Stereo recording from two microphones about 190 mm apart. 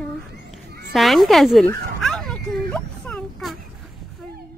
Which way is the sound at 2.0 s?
Centre (ahead or behind).